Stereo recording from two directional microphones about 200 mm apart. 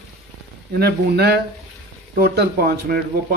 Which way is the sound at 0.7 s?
50° right (ahead or behind).